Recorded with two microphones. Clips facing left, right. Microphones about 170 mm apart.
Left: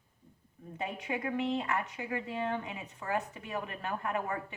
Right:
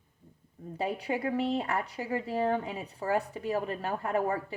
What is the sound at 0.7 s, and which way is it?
Speech, 35° right (ahead or behind).